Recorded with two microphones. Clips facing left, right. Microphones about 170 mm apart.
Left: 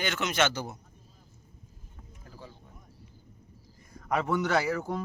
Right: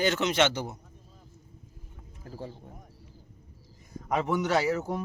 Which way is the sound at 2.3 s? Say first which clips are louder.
Right 9 dB; 40° right (ahead or behind).